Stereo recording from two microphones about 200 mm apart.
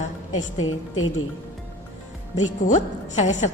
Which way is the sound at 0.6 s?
90° left.